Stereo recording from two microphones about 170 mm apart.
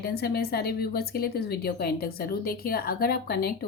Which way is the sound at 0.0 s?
70° left (ahead or behind).